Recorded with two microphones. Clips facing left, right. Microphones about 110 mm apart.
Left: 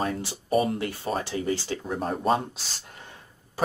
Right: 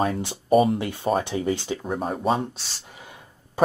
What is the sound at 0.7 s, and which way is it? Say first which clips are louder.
Speech: right 5 dB; 20° right (ahead or behind).